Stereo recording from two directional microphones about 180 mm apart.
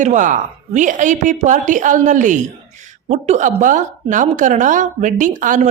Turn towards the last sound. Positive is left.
turn(degrees=-45)  # may be behind; listen again after turning